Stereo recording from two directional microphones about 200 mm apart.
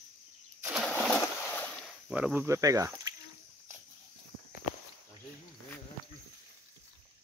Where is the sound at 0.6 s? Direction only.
5° right (ahead or behind).